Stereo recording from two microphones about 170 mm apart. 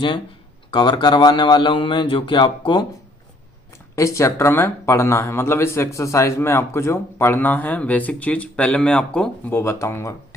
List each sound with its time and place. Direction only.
0.7 s speech: 25° left (ahead or behind)
3.9 s speech: 15° left (ahead or behind)